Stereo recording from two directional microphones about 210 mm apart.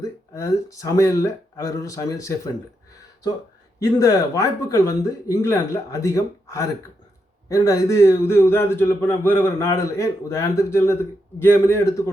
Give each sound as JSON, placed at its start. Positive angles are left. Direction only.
{"t": 0.0, "sound": "speech", "side_deg": 15}
{"t": 3.8, "sound": "a man's voice", "side_deg": 15}